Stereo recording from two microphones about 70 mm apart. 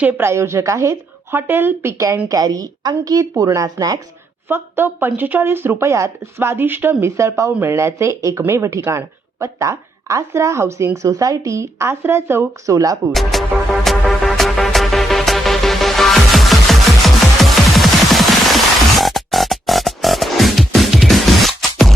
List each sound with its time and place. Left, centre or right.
0.2 s speech: right
1.3 s speech: right
2.3 s a woman's voice: right
4.4 s speech: right
5.8 s speech: right
7.2 s a woman's voice: right
12.7 s a woman's voice: right
13.1 s music: centre